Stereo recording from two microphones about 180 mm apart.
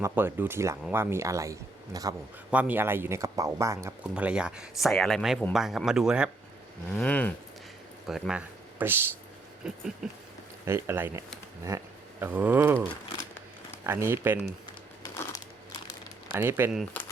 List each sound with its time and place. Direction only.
0.0 s speech: 10° right (ahead or behind)
2.5 s speech: 10° right (ahead or behind)
4.1 s speech: 5° right (ahead or behind)
6.9 s speech: 10° left (ahead or behind)
8.0 s speech: centre (ahead or behind)
10.7 s speech: 15° right (ahead or behind)
12.2 s speech: 10° right (ahead or behind)
13.8 s speech: 15° right (ahead or behind)
15.1 s crumpling: 15° left (ahead or behind)
16.3 s speech: 15° right (ahead or behind)
16.9 s crumpling: 10° left (ahead or behind)